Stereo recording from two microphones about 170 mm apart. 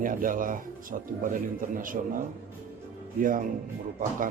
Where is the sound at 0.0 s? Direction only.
55° right (ahead or behind).